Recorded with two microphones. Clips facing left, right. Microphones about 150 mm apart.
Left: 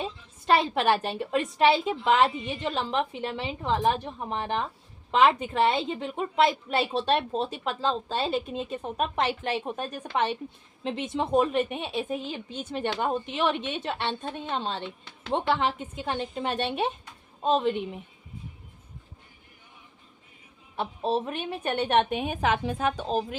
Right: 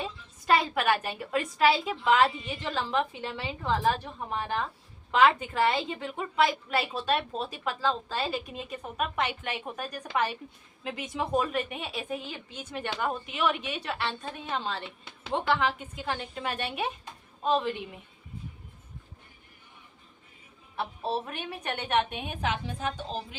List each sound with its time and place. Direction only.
0.0 s a woman's voice: 25° left (ahead or behind)
20.7 s a woman's voice: 20° left (ahead or behind); by 22.6 s 45° left (ahead or behind)
22.6 s a woman's voice: 65° left (ahead or behind)